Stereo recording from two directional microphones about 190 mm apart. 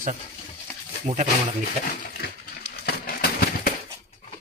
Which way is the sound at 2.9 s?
55° left (ahead or behind).